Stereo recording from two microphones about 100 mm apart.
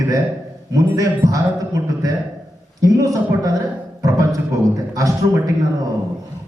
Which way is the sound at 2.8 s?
35° right (ahead or behind).